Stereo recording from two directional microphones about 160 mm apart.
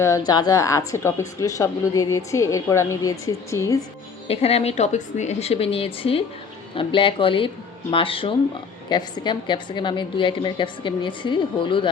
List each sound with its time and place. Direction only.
0.3 s speech: 25° left (ahead or behind)
4.3 s a woman's voice: 40° left (ahead or behind)